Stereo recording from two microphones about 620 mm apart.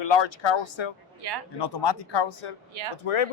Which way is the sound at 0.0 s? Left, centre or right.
Left.